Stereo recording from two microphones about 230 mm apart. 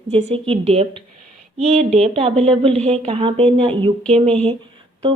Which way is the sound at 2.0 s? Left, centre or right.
Right.